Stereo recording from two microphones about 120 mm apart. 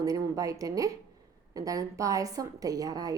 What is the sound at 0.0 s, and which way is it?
A woman's voice, 30° right (ahead or behind).